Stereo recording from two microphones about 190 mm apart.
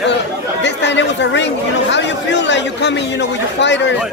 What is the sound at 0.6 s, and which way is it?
Speech, 65° left (ahead or behind).